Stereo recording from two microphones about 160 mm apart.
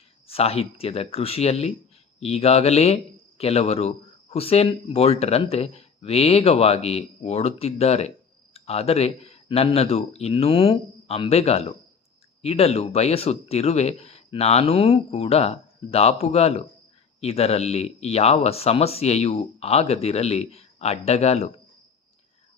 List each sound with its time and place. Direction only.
0.3 s speech: 40° left (ahead or behind)